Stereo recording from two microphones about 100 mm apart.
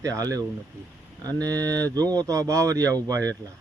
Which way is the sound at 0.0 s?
35° right (ahead or behind).